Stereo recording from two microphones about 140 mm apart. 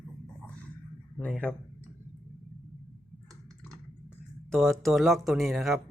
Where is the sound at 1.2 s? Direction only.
10° left (ahead or behind).